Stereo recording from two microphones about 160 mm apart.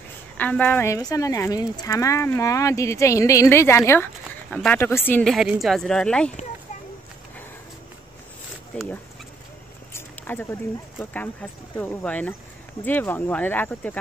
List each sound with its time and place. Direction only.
0.4 s speech: 10° left (ahead or behind)
5.2 s a woman's voice: centre (ahead or behind)
9.9 s a sound: 15° left (ahead or behind)
11.7 s speech: 15° left (ahead or behind)